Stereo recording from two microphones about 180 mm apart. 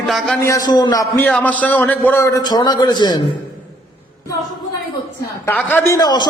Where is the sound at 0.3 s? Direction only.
15° left (ahead or behind).